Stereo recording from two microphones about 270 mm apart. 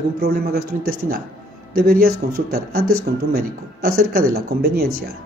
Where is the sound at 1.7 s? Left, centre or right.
Right.